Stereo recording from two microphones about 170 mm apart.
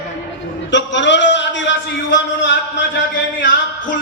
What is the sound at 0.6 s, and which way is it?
A man's voice, 90° left.